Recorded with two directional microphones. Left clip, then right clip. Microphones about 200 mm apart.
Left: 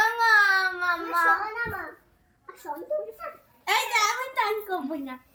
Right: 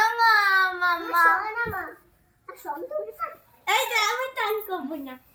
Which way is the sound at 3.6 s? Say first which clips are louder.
Right 1 dB; 35° left (ahead or behind).